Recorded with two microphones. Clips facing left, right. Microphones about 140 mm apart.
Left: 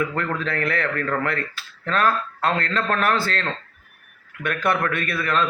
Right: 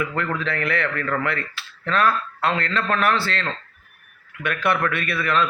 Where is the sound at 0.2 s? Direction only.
45° left (ahead or behind).